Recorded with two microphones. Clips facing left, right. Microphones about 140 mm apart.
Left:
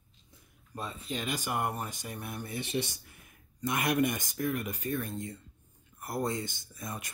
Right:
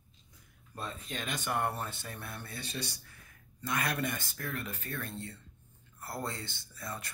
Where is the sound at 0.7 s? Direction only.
10° left (ahead or behind).